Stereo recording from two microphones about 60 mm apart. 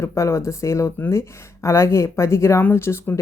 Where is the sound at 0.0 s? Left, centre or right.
Left.